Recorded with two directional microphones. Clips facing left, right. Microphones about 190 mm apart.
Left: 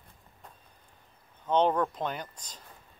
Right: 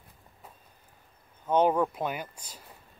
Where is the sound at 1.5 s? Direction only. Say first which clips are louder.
Right 2 dB; 10° right (ahead or behind).